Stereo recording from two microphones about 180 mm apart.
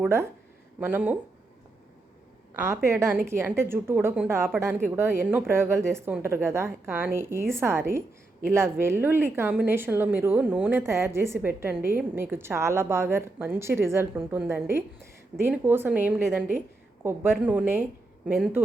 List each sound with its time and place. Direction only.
0.0 s a woman's voice: 15° right (ahead or behind)
2.6 s a woman's voice: 15° right (ahead or behind)